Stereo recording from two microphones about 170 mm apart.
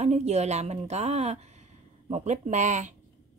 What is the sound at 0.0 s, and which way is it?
A woman's voice, 40° right (ahead or behind).